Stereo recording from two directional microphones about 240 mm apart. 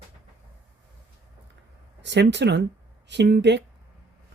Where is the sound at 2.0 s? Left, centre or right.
Right.